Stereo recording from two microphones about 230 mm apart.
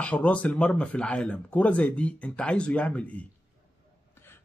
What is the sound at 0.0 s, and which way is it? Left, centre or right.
A man's voice, centre.